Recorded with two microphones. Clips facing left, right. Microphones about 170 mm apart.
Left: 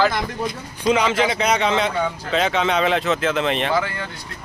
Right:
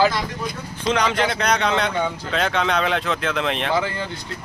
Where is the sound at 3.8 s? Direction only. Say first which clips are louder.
Even; 25° right (ahead or behind).